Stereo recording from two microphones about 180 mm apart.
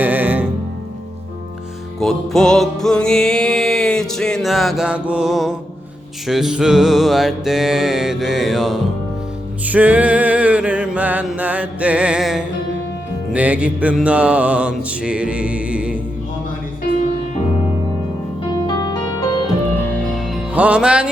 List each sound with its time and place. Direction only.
0.0 s music: 10° right (ahead or behind)
2.0 s music: centre (ahead or behind)
13.3 s mantra: 5° right (ahead or behind)
18.5 s music: 25° left (ahead or behind)
19.8 s music: 5° left (ahead or behind)